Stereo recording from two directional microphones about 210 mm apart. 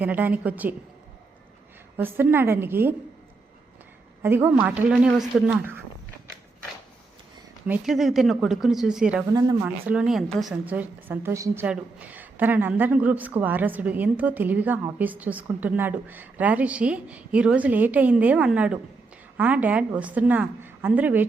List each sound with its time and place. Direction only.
0.0 s a woman's voice: 10° right (ahead or behind)
2.0 s a woman's voice: 10° right (ahead or behind)
4.2 s a woman's voice: 10° right (ahead or behind)
7.7 s speech: centre (ahead or behind)
9.3 s a woman's voice: 20° right (ahead or behind)
9.6 s a woman's voice: 5° right (ahead or behind)